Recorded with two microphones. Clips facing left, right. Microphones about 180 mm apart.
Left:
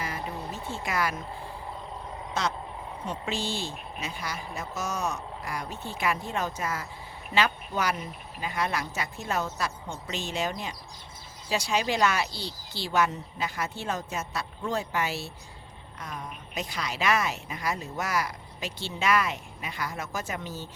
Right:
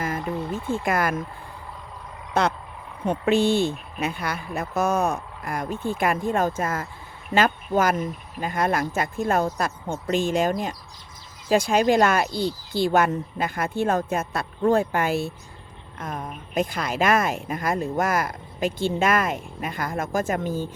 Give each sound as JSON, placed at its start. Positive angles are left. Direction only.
{"t": 0.0, "sound": "a sound", "side_deg": -50}
{"t": 0.5, "sound": "speech", "side_deg": -50}
{"t": 2.4, "sound": "speech", "side_deg": -60}